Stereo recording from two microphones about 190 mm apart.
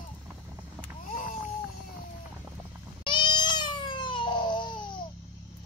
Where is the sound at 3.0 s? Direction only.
25° left (ahead or behind).